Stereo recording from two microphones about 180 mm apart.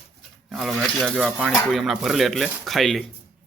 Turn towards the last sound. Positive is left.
turn(degrees=0)  # may be behind; listen again after turning